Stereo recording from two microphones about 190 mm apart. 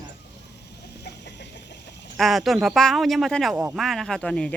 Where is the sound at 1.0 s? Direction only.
65° left (ahead or behind).